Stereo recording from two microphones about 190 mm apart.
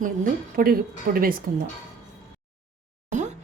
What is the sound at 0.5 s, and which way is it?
Speech, 50° right (ahead or behind).